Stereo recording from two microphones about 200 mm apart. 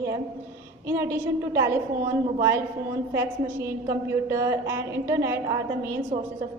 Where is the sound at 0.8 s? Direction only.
10° right (ahead or behind).